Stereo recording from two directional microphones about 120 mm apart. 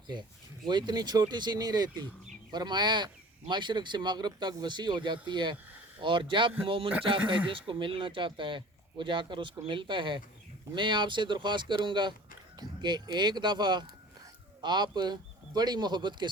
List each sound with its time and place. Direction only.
0.7 s speech: 35° right (ahead or behind)